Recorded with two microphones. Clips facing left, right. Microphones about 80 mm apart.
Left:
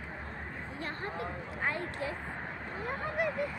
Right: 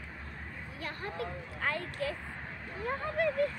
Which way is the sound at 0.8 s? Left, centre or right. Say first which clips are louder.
Even; left.